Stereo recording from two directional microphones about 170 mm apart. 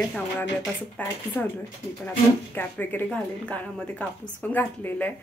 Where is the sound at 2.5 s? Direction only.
10° left (ahead or behind).